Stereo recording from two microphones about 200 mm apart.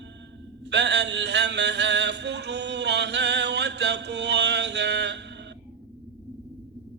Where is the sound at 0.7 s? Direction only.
60° right (ahead or behind).